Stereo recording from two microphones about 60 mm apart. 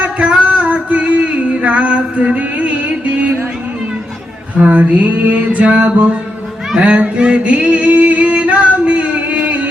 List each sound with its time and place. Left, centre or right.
0.0 s music: right
4.5 s a sound: right
6.7 s singing: right